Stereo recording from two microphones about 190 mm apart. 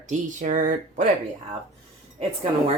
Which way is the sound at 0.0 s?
40° right (ahead or behind).